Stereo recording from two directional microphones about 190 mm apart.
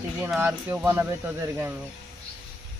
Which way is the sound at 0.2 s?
10° right (ahead or behind).